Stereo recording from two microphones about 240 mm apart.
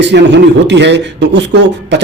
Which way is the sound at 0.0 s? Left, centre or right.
Right.